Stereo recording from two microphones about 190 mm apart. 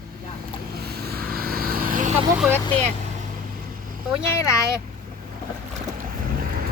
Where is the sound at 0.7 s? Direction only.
55° right (ahead or behind).